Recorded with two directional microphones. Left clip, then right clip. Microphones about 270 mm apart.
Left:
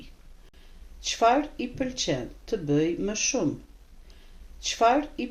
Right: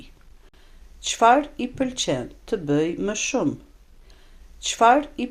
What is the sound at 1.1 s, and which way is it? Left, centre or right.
Speech, right.